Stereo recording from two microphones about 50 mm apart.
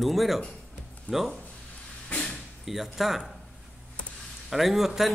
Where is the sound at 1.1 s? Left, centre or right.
Left.